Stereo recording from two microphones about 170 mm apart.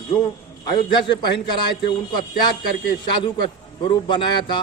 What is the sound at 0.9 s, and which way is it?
A man's voice, 25° left (ahead or behind).